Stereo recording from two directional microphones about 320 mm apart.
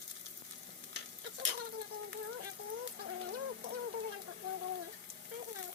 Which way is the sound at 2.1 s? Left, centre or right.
Right.